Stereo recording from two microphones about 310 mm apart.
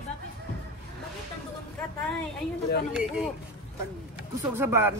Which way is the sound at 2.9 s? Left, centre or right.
Centre.